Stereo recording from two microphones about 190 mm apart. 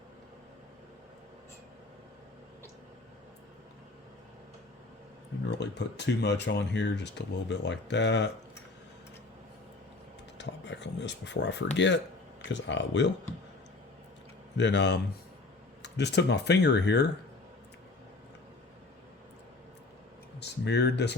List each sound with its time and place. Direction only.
5.5 s speech: 65° left (ahead or behind)
10.3 s speech: 65° left (ahead or behind)
14.6 s speech: 70° left (ahead or behind)
20.4 s speech: 65° left (ahead or behind)